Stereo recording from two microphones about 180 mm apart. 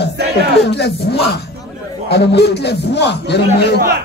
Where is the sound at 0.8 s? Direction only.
65° left (ahead or behind).